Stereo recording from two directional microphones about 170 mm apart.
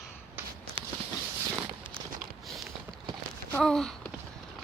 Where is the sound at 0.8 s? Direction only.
35° right (ahead or behind).